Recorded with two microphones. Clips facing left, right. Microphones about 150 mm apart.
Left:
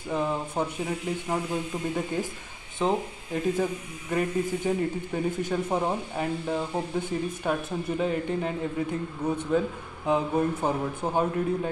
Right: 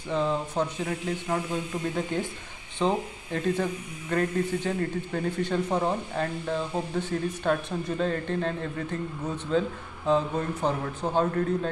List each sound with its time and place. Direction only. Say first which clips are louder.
0.1 s speech: right 1 dB; 10° left (ahead or behind)